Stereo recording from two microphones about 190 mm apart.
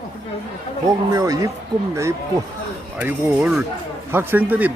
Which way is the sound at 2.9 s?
10° right (ahead or behind).